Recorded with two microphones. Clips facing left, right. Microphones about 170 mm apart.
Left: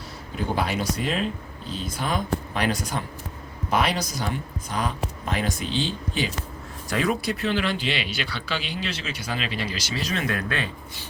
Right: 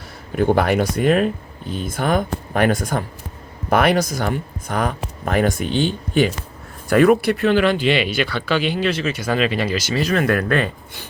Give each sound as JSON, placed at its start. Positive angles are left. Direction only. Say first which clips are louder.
{"t": 0.3, "sound": "speech", "louder": "right 10 dB", "side_deg": -55}